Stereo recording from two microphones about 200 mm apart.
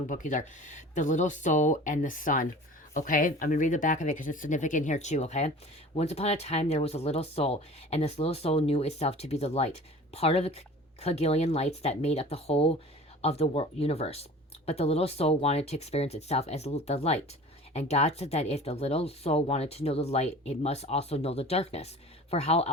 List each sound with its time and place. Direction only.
0.1 s speech: 40° left (ahead or behind)